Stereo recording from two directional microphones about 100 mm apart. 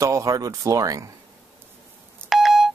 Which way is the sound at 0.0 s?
35° right (ahead or behind).